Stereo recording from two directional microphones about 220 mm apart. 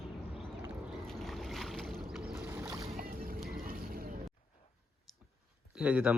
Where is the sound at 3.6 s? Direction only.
40° right (ahead or behind).